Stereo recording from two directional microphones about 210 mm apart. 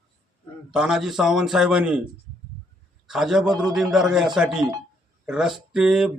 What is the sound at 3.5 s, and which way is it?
Speech, 20° right (ahead or behind).